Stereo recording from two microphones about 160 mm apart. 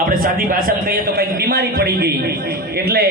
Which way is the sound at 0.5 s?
75° right (ahead or behind).